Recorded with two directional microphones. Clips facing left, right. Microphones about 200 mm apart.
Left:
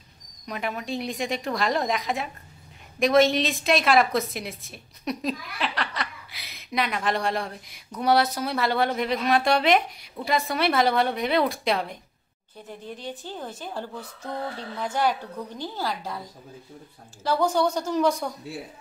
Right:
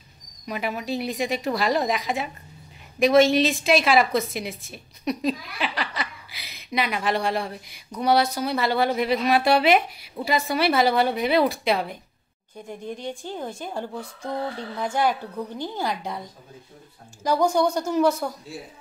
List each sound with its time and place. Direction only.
0.5 s a woman's voice: 5° right (ahead or behind)